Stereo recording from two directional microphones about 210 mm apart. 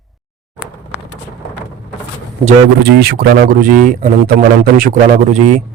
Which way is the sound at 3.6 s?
40° right (ahead or behind).